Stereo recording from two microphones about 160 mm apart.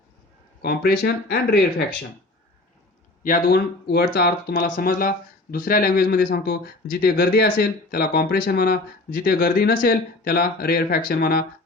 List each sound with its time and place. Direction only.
0.6 s speech: 80° left
3.2 s speech: 65° left (ahead or behind)